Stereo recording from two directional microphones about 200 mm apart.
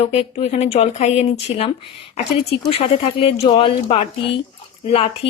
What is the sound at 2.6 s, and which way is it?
Speech, 30° left (ahead or behind).